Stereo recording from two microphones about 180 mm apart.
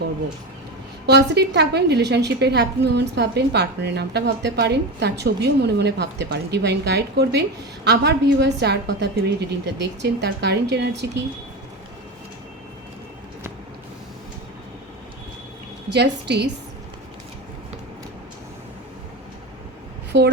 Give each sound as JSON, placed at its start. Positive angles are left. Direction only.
{"t": 1.0, "sound": "a woman's voice", "side_deg": -70}
{"t": 15.9, "sound": "a woman's voice", "side_deg": -70}
{"t": 20.1, "sound": "a woman's voice", "side_deg": -80}